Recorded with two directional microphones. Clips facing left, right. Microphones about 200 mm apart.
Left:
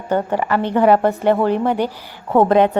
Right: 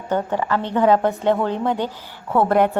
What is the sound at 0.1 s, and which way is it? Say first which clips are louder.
A woman's voice: left 3 dB; 10° left (ahead or behind).